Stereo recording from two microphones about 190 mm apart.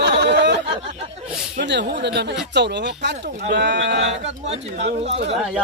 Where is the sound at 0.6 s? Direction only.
30° right (ahead or behind).